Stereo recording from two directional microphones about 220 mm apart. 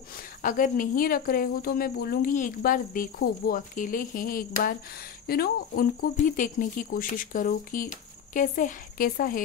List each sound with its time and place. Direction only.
0.4 s speech: 40° left (ahead or behind)